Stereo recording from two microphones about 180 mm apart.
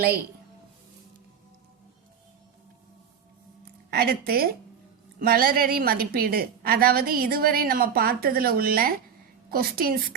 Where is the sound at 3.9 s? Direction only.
60° right (ahead or behind).